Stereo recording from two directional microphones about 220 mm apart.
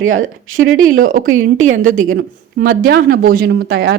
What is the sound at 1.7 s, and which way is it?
Speech, 35° right (ahead or behind).